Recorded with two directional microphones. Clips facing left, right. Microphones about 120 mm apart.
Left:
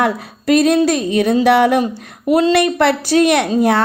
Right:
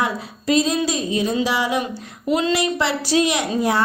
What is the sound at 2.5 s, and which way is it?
A woman's voice, 60° left (ahead or behind).